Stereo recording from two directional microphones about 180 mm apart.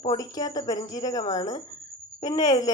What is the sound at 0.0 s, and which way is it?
Speech, 20° left (ahead or behind).